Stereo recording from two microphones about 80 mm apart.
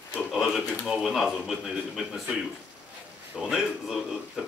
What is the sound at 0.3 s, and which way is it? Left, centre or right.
Speech, centre.